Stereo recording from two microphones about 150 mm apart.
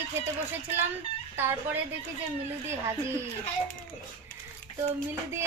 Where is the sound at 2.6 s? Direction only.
15° right (ahead or behind).